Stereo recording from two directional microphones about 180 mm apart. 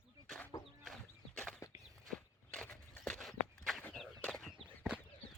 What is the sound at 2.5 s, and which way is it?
Walk, 5° left (ahead or behind).